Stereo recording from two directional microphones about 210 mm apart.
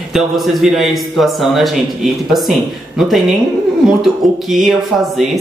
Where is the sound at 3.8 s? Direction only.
Centre (ahead or behind).